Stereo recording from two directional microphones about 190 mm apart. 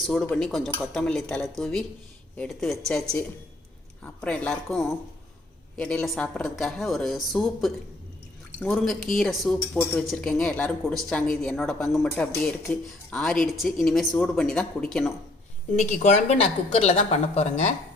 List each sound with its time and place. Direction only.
0.0 s speech: 5° left (ahead or behind)
15.7 s a woman's voice: 40° left (ahead or behind)